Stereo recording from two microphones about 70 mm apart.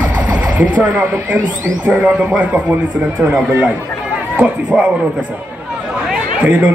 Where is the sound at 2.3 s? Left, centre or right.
Right.